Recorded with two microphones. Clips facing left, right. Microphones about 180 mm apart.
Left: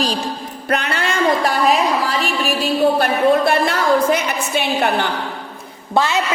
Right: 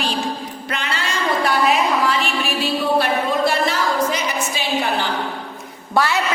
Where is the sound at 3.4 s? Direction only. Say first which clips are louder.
Left 2 dB; 60° left (ahead or behind).